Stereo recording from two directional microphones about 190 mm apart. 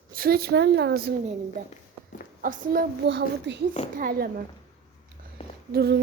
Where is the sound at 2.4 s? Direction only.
45° right (ahead or behind).